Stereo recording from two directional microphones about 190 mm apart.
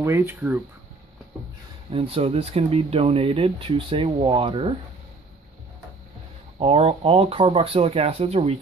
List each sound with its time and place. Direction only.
0.0 s speech: 15° right (ahead or behind)
1.9 s speech: 30° right (ahead or behind)
6.6 s speech: 30° right (ahead or behind)